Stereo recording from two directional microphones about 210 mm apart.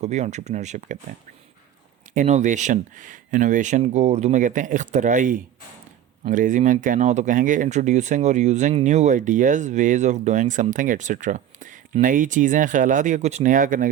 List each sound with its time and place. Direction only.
0.0 s speech: 35° right (ahead or behind)
2.1 s speech: 35° right (ahead or behind)